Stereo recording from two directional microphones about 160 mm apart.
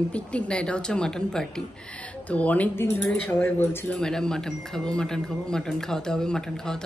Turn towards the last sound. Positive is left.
turn(degrees=5)  # may be behind; listen again after turning